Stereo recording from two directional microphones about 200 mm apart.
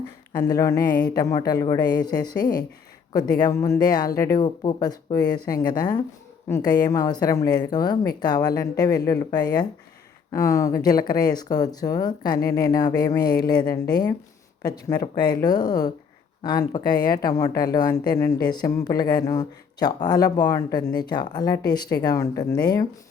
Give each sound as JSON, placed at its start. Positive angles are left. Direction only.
{"t": 0.4, "sound": "speech", "side_deg": 15}